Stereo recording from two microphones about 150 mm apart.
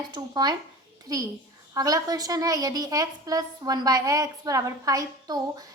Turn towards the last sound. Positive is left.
turn(degrees=-25)  # may be behind; listen again after turning